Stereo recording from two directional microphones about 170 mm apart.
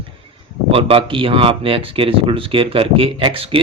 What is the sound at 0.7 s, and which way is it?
Speech, 35° right (ahead or behind).